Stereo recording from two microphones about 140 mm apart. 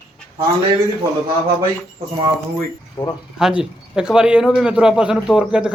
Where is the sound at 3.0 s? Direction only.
30° left (ahead or behind).